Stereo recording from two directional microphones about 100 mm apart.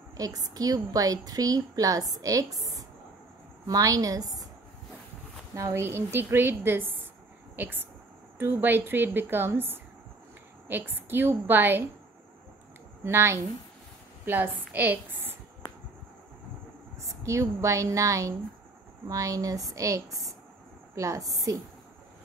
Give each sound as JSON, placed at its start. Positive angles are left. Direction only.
{"t": 0.2, "sound": "a woman's voice", "side_deg": -40}
{"t": 3.6, "sound": "a woman's voice", "side_deg": -35}
{"t": 5.5, "sound": "a woman's voice", "side_deg": -30}
{"t": 13.0, "sound": "a woman's voice", "side_deg": -25}
{"t": 17.0, "sound": "a woman's voice", "side_deg": -30}